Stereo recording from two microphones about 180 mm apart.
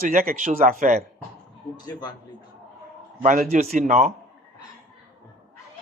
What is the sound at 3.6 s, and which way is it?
Speech, 40° right (ahead or behind).